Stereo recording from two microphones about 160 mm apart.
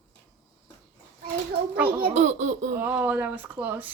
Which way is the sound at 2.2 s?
50° right (ahead or behind).